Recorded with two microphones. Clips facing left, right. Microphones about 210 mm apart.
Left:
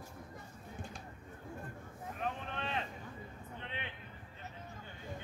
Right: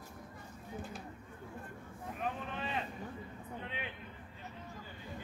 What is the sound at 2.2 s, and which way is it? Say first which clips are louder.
Boat: right 1 dB; 5° right (ahead or behind).